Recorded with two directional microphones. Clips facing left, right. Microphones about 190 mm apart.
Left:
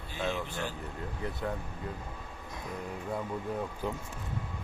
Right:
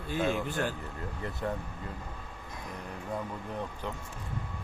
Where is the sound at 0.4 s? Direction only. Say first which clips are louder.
Right 5 dB; 50° right (ahead or behind).